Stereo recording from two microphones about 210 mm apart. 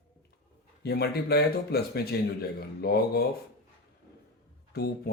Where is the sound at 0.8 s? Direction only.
50° left (ahead or behind).